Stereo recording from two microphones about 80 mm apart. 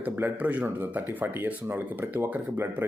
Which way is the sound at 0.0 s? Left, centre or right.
Right.